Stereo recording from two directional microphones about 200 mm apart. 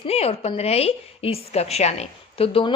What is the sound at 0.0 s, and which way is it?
A woman's voice, 30° left (ahead or behind).